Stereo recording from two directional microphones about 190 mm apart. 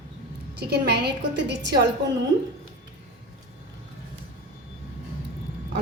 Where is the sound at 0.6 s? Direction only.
60° right (ahead or behind).